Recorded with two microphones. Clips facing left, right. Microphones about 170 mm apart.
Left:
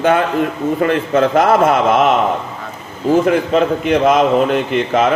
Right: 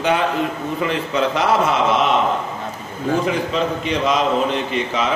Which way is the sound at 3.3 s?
55° left (ahead or behind).